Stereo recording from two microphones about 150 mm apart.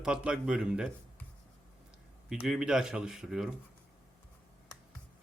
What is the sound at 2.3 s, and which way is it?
Speech, 5° right (ahead or behind).